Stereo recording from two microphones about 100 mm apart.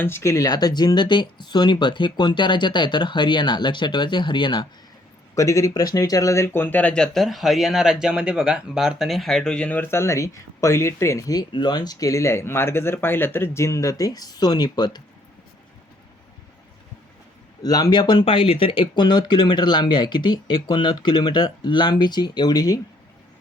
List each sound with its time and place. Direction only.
0.0 s speech: 25° left (ahead or behind); by 4.7 s 50° left (ahead or behind)
5.3 s speech: 30° left (ahead or behind)
17.6 s speech: 40° left (ahead or behind)